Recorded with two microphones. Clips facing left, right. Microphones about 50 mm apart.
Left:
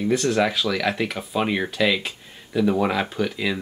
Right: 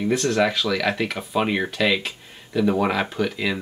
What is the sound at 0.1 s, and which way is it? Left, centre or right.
Speech, centre.